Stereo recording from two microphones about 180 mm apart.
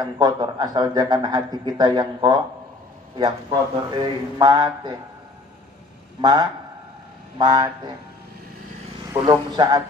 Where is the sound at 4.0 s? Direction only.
25° right (ahead or behind).